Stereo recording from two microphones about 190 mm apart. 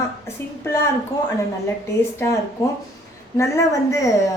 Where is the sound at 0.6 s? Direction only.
15° left (ahead or behind).